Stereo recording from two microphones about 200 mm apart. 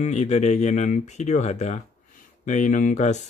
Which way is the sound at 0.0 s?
35° left (ahead or behind).